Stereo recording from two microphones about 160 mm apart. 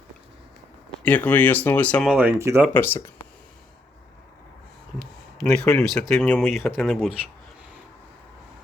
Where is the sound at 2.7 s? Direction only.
15° left (ahead or behind).